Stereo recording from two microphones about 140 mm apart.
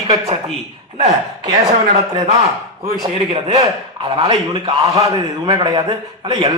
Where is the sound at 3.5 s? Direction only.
35° right (ahead or behind).